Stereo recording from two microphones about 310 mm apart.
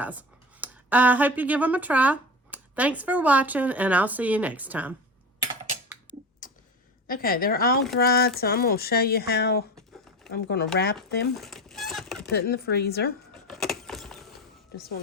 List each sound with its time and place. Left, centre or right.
0.0 s speech: centre
6.4 s tick-tock: left
7.1 s a woman's voice: left
11.3 s a sound: centre
12.3 s speech: left
13.3 s vehicle: centre
14.8 s a woman's voice: left